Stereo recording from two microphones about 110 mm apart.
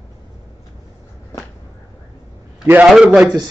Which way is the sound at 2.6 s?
20° right (ahead or behind).